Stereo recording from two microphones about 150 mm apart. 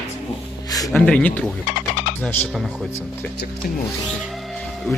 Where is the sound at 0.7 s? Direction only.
25° left (ahead or behind).